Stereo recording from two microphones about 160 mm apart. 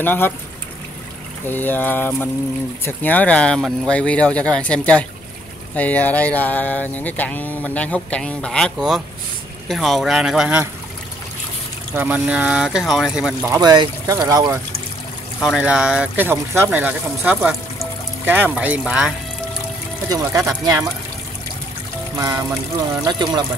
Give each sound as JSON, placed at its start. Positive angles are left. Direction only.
{"t": 0.0, "sound": "a sound", "side_deg": 10}
{"t": 1.5, "sound": "a sound", "side_deg": 10}
{"t": 9.7, "sound": "speech", "side_deg": 0}
{"t": 11.9, "sound": "speech", "side_deg": -10}
{"t": 13.6, "sound": "speech", "side_deg": -25}
{"t": 15.4, "sound": "speech", "side_deg": -5}
{"t": 20.1, "sound": "speech", "side_deg": -20}
{"t": 23.0, "sound": "speech", "side_deg": -25}